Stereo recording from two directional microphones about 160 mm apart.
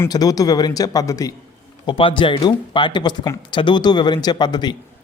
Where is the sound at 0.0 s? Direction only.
25° left (ahead or behind).